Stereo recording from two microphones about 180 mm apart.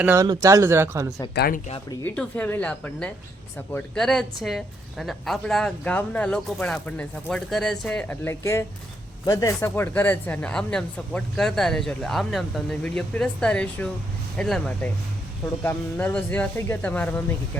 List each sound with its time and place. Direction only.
0.0 s speech: 10° right (ahead or behind)
1.4 s speech: 50° left (ahead or behind)
2.1 s speech: 10° left (ahead or behind)